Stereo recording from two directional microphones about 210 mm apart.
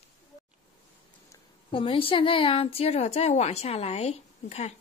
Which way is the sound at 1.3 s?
25° left (ahead or behind).